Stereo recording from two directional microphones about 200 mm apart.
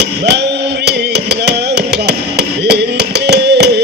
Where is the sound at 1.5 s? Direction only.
55° right (ahead or behind).